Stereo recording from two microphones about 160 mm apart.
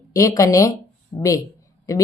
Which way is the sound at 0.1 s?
20° left (ahead or behind).